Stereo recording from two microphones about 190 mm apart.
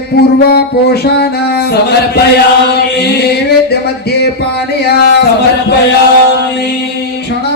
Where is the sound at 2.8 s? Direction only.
60° left (ahead or behind).